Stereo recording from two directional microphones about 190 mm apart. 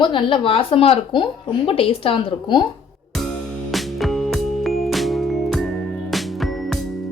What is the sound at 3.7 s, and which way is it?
Music, centre (ahead or behind).